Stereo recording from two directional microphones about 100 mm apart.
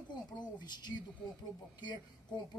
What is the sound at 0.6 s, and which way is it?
Speech, 45° left (ahead or behind).